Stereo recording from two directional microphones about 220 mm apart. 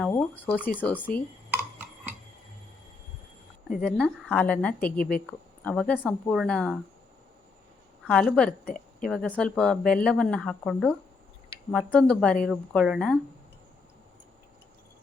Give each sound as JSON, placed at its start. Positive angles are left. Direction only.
{"t": 0.1, "sound": "speech", "side_deg": 10}
{"t": 3.8, "sound": "speech", "side_deg": 5}
{"t": 8.0, "sound": "speech", "side_deg": 5}
{"t": 8.6, "sound": "a sound", "side_deg": 40}
{"t": 9.0, "sound": "speech", "side_deg": 0}